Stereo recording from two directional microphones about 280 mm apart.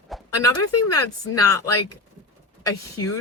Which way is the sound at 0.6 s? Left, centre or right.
Left.